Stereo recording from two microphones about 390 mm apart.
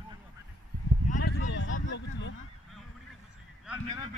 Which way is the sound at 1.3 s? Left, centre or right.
Left.